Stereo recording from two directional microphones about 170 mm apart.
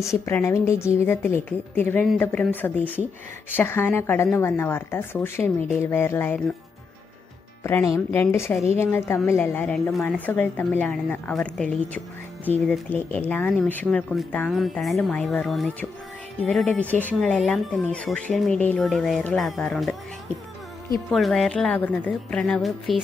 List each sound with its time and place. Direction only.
0.0 s speech: 15° left (ahead or behind)
7.6 s speech: 15° left (ahead or behind)
21.1 s speech: centre (ahead or behind)